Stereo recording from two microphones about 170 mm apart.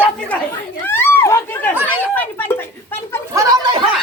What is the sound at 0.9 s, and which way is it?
Chatter, 15° left (ahead or behind).